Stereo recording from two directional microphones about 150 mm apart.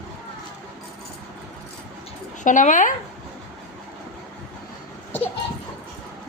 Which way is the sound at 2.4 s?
60° left (ahead or behind).